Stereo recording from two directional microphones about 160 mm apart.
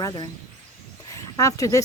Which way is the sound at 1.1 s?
20° left (ahead or behind).